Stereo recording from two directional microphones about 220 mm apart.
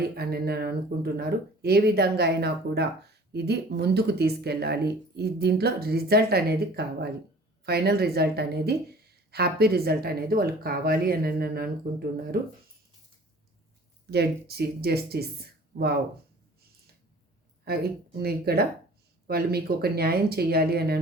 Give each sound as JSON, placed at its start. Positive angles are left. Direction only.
{"t": 0.0, "sound": "speech", "side_deg": -45}
{"t": 14.1, "sound": "speech", "side_deg": -45}
{"t": 17.7, "sound": "speech", "side_deg": -45}